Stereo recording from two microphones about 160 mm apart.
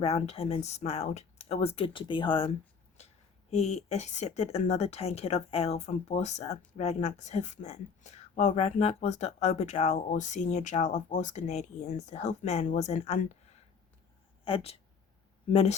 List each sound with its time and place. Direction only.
0.0 s a woman's voice: 40° left (ahead or behind)
14.4 s speech: 35° left (ahead or behind)